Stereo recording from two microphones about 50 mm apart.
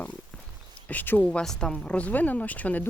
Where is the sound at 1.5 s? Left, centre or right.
Centre; by 2.8 s left.